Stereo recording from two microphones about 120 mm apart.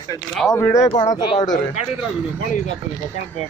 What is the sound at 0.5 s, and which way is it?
Speech, 25° left (ahead or behind).